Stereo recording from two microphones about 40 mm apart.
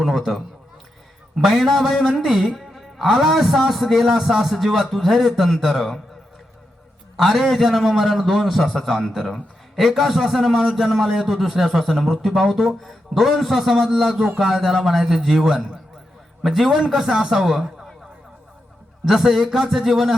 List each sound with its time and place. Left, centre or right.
0.0 s a man's voice: centre
7.2 s a man's voice: centre
19.0 s a man's voice: centre